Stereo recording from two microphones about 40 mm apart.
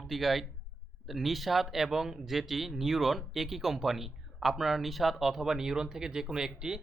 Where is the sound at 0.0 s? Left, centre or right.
Centre.